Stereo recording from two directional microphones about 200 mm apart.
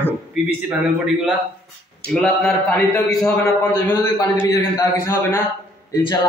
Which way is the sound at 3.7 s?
15° left (ahead or behind).